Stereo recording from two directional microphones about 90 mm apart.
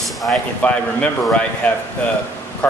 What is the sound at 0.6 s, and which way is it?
Speech, 15° left (ahead or behind).